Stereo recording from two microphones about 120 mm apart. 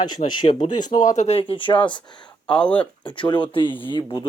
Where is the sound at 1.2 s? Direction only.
60° left (ahead or behind); by 2.0 s 40° left (ahead or behind).